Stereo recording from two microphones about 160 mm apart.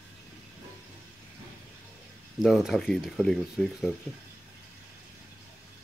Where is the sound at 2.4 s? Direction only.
Centre (ahead or behind).